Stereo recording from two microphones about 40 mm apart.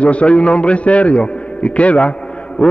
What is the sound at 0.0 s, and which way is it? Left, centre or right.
A man's voice, left.